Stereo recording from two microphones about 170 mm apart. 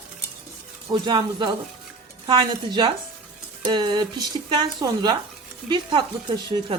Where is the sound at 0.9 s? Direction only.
25° right (ahead or behind).